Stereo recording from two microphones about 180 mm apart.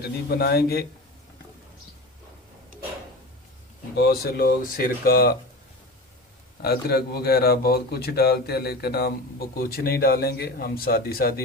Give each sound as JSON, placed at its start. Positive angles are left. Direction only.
{"t": 0.0, "sound": "speech", "side_deg": 60}
{"t": 3.9, "sound": "speech", "side_deg": 60}
{"t": 6.6, "sound": "speech", "side_deg": 60}